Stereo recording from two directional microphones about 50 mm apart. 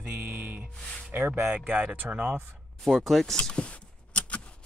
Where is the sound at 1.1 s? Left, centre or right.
Right.